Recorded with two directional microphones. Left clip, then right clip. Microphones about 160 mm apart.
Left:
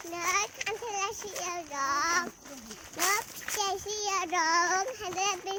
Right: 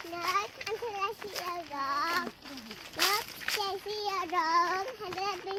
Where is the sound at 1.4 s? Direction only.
15° left (ahead or behind).